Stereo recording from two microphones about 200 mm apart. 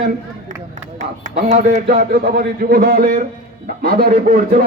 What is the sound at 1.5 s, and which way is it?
Speech, 35° right (ahead or behind).